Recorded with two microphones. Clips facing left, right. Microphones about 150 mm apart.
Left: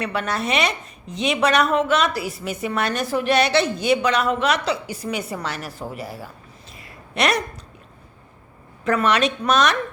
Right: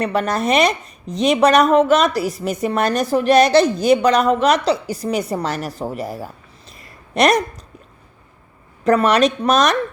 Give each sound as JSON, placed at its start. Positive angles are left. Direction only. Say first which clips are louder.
{"t": 0.0, "sound": "a woman's voice", "louder": "right 6 dB", "side_deg": -40}
{"t": 8.8, "sound": "a woman's voice", "louder": "right 5 dB", "side_deg": -40}